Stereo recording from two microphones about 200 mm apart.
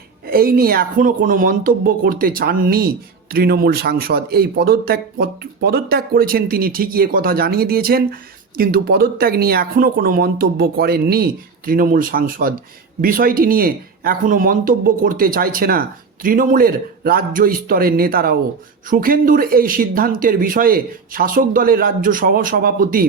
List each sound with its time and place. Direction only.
0.3 s speech: 50° right (ahead or behind)